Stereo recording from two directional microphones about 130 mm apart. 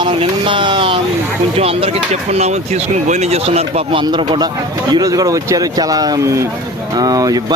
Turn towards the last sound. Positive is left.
turn(degrees=-30)  # may be behind; listen again after turning